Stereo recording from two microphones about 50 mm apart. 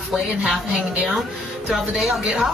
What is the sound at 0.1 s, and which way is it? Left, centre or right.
Speech, centre.